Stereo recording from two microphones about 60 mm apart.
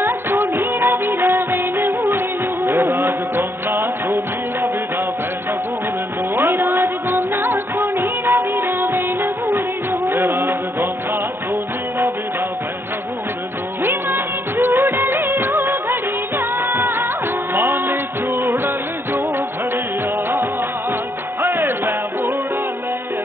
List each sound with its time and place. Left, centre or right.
0.0 s music: right
6.3 s music: right
13.8 s music of bollywood: right
15.5 s music: right
21.4 s music: right
21.6 s music: right